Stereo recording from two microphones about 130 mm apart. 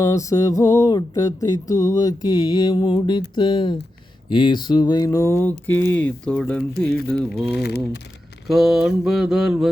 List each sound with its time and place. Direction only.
0.0 s mantra: 25° left (ahead or behind)
4.3 s a sound: 35° left (ahead or behind); by 7.4 s 5° left (ahead or behind)
8.4 s mantra: centre (ahead or behind)